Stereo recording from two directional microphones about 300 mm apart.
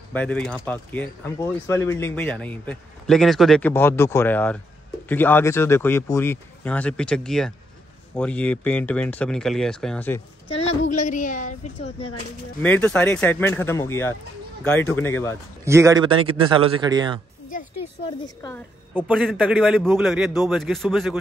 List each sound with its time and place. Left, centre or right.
0.1 s speech: centre
10.5 s a sound: left
10.9 s a woman's voice: left
12.6 s speech: centre
15.6 s a man's voice: centre
18.2 s speech: centre
18.9 s speech: centre